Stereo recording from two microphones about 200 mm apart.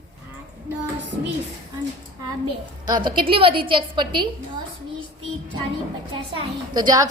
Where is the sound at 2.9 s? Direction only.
20° right (ahead or behind).